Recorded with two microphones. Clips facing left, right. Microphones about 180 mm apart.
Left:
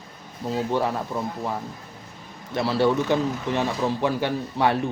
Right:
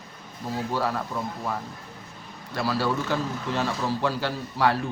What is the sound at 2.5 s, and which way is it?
A man's voice, 25° left (ahead or behind).